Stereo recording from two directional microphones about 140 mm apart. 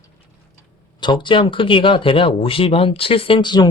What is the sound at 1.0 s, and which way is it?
Speech, 35° left (ahead or behind).